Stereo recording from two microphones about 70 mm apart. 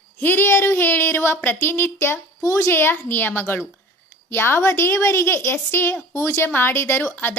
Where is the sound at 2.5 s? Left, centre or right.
Left.